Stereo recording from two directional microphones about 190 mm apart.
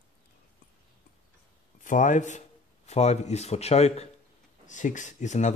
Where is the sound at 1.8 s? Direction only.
40° left (ahead or behind).